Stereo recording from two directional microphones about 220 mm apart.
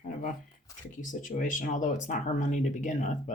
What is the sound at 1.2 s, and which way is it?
Speech, 35° left (ahead or behind).